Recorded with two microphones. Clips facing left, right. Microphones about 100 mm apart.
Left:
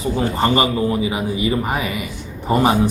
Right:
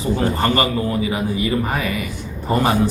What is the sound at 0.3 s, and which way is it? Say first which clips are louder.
A man's voice: left 2 dB; 20° left (ahead or behind).